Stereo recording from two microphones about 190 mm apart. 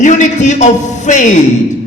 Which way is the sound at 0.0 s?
40° left (ahead or behind).